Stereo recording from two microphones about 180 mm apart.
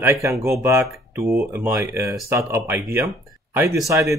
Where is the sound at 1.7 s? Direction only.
15° right (ahead or behind).